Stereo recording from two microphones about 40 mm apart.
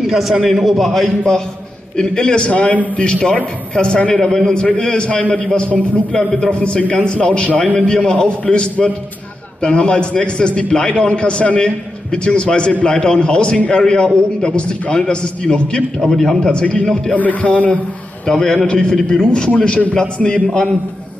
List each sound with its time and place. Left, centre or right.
0.0 s a man's voice: centre
1.0 s a man's voice: centre
6.9 s a man's voice: left
16.0 s a man's voice: centre
17.1 s a man's voice: left
18.2 s a man's voice: centre